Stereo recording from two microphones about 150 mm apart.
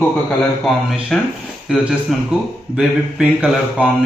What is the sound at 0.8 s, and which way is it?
Speech, centre (ahead or behind).